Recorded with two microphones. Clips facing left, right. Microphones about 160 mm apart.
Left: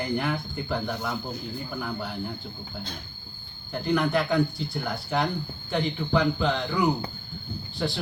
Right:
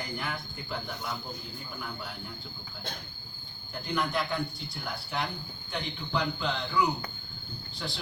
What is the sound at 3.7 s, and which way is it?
Speech, 60° left (ahead or behind).